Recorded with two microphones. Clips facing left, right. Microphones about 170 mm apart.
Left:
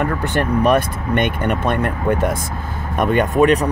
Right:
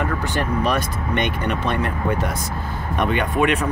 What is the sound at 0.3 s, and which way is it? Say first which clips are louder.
Speech: left 8 dB; 55° left (ahead or behind).